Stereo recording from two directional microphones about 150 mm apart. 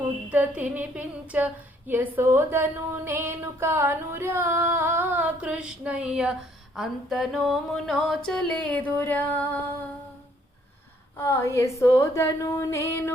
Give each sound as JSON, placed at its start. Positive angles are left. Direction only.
{"t": 0.3, "sound": "a woman's voice", "side_deg": -10}
{"t": 6.7, "sound": "a sound", "side_deg": 0}
{"t": 11.2, "sound": "speech", "side_deg": 20}